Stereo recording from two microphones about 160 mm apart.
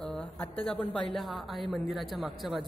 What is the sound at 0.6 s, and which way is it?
A woman's voice, 5° left (ahead or behind).